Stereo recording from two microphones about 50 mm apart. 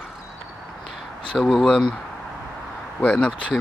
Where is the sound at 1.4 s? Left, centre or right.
Centre.